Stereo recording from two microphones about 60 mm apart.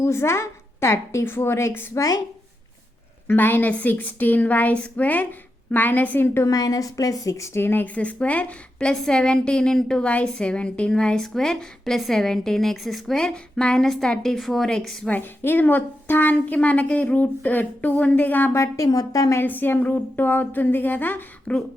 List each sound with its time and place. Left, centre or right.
0.0 s a woman's voice: left
2.0 s a woman's voice: left
3.2 s a woman's voice: left
6.5 s a woman's voice: left
7.6 s speech: left
7.9 s a woman's voice: left
8.9 s a woman's voice: centre
13.2 s a woman's voice: centre
13.8 s a woman's voice: centre
15.1 s a woman's voice: left
18.5 s a woman's voice: left
18.9 s a woman's voice: left
19.5 s speech: left
21.5 s a woman's voice: centre